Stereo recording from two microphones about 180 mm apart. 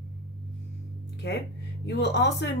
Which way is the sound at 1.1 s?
70° left (ahead or behind).